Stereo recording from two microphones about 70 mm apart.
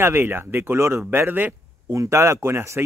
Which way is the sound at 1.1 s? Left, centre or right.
Right.